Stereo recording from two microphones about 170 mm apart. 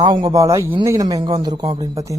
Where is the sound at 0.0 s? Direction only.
25° right (ahead or behind).